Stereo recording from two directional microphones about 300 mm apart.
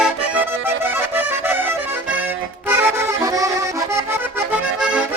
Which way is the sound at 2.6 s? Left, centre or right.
Centre.